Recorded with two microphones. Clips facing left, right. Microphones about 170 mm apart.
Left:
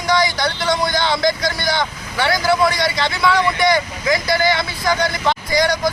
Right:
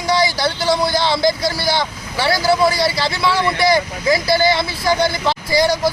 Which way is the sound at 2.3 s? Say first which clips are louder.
Right 2 dB; 30° right (ahead or behind).